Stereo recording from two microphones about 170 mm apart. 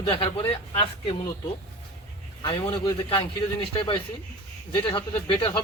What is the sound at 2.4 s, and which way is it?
Speech, 30° left (ahead or behind).